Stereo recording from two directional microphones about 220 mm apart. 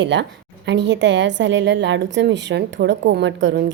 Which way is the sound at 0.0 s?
55° right (ahead or behind).